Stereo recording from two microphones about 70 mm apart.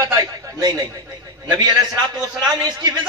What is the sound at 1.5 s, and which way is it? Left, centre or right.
A man's voice, right.